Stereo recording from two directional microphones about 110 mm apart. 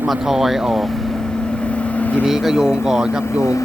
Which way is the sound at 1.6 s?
10° left (ahead or behind).